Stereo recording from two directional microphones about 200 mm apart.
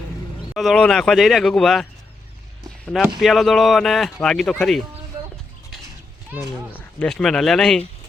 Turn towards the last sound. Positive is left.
turn(degrees=5)  # may be behind; listen again after turning